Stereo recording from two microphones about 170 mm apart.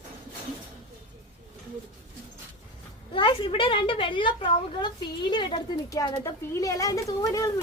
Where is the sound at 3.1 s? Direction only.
30° left (ahead or behind).